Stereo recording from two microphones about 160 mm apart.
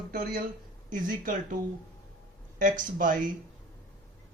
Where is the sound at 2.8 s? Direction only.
55° right (ahead or behind).